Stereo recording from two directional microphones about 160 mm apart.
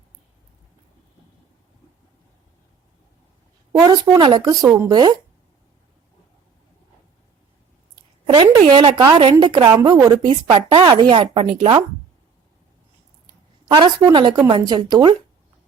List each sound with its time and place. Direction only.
3.7 s a woman's voice: 25° right (ahead or behind)
8.3 s a woman's voice: 30° right (ahead or behind)
13.7 s a woman's voice: 25° right (ahead or behind)